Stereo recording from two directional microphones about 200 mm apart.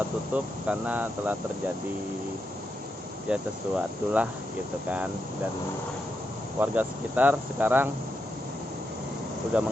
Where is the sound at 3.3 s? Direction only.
5° right (ahead or behind).